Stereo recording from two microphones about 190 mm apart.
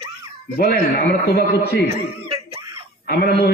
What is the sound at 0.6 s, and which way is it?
A man's voice, 50° left (ahead or behind).